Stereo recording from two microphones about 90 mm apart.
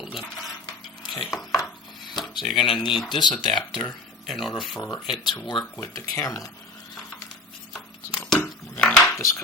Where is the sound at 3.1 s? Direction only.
55° left (ahead or behind).